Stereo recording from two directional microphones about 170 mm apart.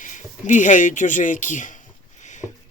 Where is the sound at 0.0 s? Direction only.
50° left (ahead or behind).